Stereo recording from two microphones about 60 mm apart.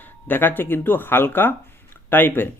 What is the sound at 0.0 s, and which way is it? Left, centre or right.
A man's voice, left.